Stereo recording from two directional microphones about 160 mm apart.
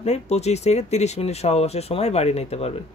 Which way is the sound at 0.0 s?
40° left (ahead or behind).